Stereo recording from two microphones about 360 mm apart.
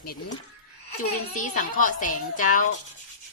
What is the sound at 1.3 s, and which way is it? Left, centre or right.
A woman's voice, left.